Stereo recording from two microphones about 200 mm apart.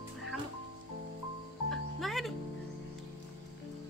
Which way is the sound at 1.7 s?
Centre (ahead or behind).